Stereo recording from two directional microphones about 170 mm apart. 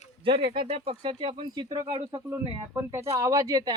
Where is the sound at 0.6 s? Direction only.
35° right (ahead or behind).